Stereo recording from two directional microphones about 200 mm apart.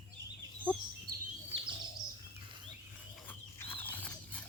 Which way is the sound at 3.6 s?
10° left (ahead or behind).